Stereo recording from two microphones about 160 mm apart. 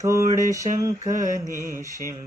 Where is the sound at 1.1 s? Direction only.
55° right (ahead or behind).